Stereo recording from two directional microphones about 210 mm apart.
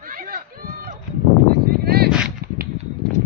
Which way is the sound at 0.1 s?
40° right (ahead or behind).